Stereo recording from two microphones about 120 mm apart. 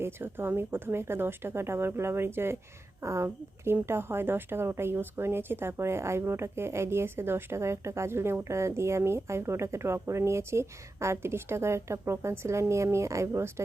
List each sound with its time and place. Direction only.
0.0 s a woman's voice: 20° right (ahead or behind)